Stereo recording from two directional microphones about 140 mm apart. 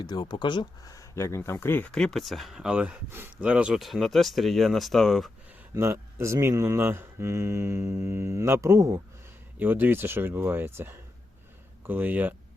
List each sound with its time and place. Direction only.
0.0 s speech: 30° left (ahead or behind); by 1.9 s 15° left (ahead or behind)
1.9 s speech: 5° left (ahead or behind)
5.7 s speech: 20° right (ahead or behind)